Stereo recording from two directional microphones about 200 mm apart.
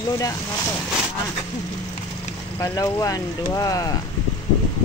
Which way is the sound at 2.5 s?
15° left (ahead or behind).